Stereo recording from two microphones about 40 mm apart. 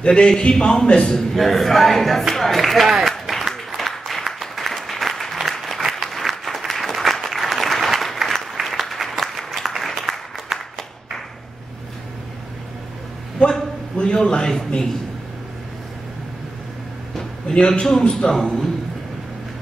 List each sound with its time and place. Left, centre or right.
0.0 s a man's voice: left
1.1 s a man's voice: centre
2.9 s applause: centre
13.4 s a sound: centre
13.9 s a man's voice: left
17.2 s a sound: centre
18.3 s a man's voice: centre